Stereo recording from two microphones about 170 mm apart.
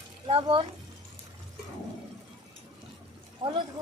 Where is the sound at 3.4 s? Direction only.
35° right (ahead or behind).